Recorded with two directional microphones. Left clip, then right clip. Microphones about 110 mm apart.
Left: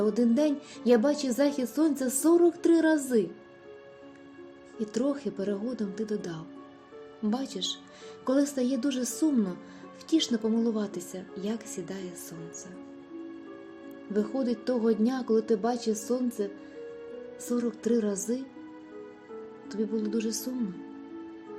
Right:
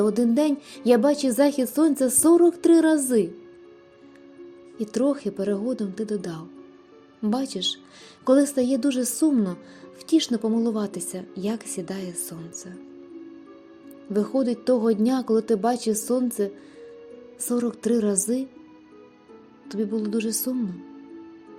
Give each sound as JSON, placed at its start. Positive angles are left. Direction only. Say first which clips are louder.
{"t": 0.0, "sound": "speech", "louder": "right 4 dB", "side_deg": -80}
{"t": 4.8, "sound": "speech", "louder": "right 6 dB", "side_deg": -70}
{"t": 7.2, "sound": "speech", "louder": "right 6 dB", "side_deg": -70}
{"t": 8.2, "sound": "speech", "louder": "right 7 dB", "side_deg": -65}
{"t": 14.1, "sound": "a woman's voice", "louder": "right 6 dB", "side_deg": -70}
{"t": 17.7, "sound": "a woman's voice", "louder": "right 4 dB", "side_deg": -90}
{"t": 19.6, "sound": "a woman's voice", "louder": "right 4 dB", "side_deg": -90}